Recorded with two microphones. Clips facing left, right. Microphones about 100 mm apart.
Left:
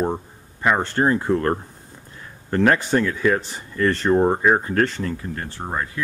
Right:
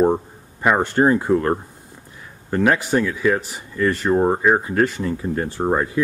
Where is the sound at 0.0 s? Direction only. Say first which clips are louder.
Right 7 dB; 20° right (ahead or behind).